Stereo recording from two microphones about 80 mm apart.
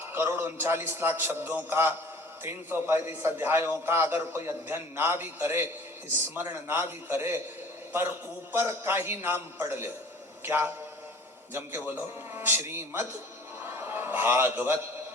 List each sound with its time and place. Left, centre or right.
0.1 s a man's voice: right
8.5 s a man's voice: right
13.7 s a sound: right